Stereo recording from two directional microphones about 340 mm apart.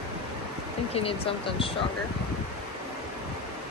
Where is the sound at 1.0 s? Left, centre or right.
Centre.